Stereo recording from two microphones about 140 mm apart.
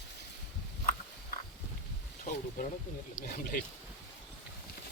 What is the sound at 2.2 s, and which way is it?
Speech, 65° left (ahead or behind).